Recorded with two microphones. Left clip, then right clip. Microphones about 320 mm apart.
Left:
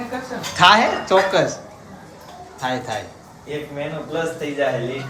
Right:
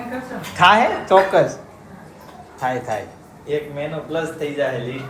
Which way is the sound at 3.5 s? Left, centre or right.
Right.